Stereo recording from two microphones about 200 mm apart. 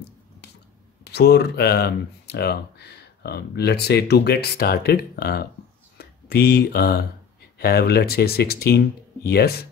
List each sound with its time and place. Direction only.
1.0 s speech: 55° left (ahead or behind)